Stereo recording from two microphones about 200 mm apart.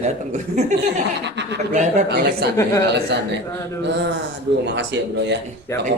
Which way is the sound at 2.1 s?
55° right (ahead or behind).